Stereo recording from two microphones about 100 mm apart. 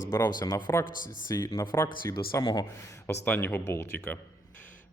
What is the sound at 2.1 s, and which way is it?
Speech, 40° left (ahead or behind).